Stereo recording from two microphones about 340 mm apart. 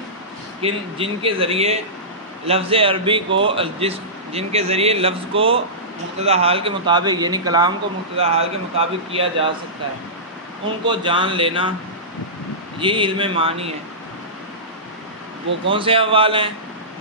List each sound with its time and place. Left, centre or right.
0.6 s a man's voice: centre
10.9 s a man's voice: centre
12.7 s a man's voice: centre
15.7 s a man's voice: centre